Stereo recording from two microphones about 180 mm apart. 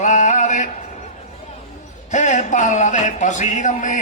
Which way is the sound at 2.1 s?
40° left (ahead or behind).